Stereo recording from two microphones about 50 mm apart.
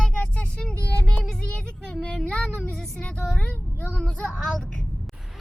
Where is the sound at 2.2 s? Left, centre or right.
Centre.